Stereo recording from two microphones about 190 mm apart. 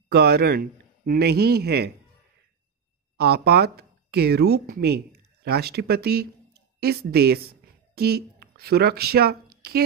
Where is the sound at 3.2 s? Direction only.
55° right (ahead or behind).